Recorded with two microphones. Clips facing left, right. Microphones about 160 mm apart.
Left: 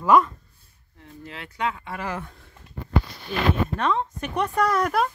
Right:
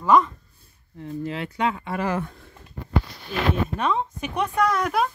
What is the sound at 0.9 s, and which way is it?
Speech, 30° right (ahead or behind).